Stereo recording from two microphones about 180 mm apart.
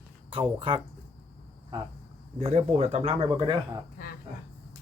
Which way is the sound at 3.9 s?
55° left (ahead or behind).